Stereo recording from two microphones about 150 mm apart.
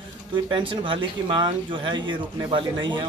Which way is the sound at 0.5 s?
35° right (ahead or behind).